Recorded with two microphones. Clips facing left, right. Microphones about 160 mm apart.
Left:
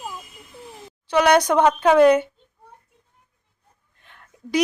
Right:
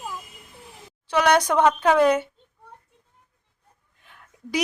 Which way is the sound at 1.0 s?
Centre (ahead or behind).